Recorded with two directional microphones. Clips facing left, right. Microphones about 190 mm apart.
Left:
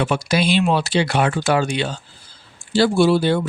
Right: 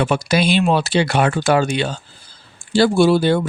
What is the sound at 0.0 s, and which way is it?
Speech, 50° right (ahead or behind).